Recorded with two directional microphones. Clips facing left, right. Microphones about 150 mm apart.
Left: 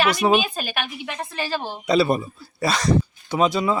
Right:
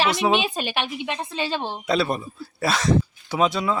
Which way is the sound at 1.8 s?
Centre (ahead or behind).